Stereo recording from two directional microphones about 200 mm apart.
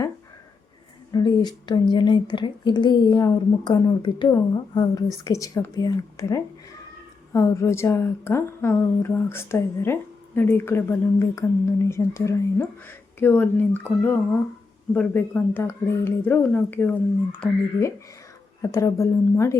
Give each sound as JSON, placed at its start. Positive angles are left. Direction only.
{"t": 1.1, "sound": "a woman's voice", "side_deg": 20}